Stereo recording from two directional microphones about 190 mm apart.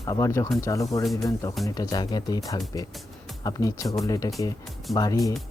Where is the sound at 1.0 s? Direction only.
Centre (ahead or behind).